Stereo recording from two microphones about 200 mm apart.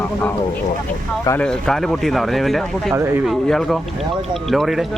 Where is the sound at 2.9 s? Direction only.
15° right (ahead or behind).